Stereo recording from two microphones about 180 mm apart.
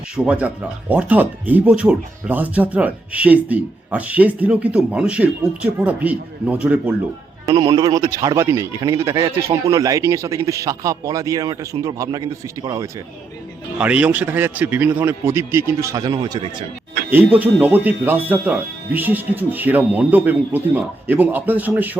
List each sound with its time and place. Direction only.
0.3 s speech: 5° right (ahead or behind)
7.4 s speech: 25° right (ahead or behind)
13.7 s speech: 10° right (ahead or behind); by 16.6 s 25° right (ahead or behind)
17.1 s speech: 10° right (ahead or behind)